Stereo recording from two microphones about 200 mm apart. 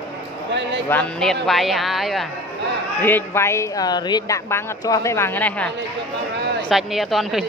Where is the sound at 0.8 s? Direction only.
5° left (ahead or behind).